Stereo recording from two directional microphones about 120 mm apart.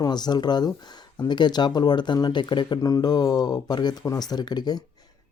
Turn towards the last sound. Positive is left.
turn(degrees=35)  # may be behind; listen again after turning